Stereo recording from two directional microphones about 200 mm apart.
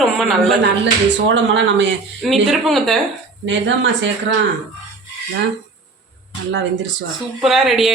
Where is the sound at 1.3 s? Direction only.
65° right (ahead or behind).